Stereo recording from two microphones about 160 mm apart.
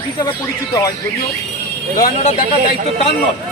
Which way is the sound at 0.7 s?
25° left (ahead or behind).